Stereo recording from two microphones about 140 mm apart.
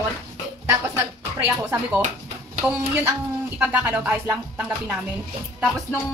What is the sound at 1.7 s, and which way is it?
Speech, 10° right (ahead or behind).